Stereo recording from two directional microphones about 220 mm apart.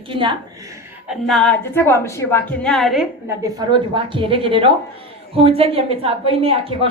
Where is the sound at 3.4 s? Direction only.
20° right (ahead or behind).